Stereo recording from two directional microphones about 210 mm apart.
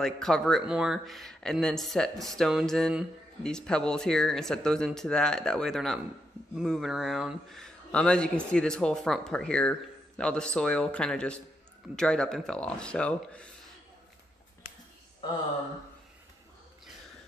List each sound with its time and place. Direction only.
0.0 s speech: centre (ahead or behind)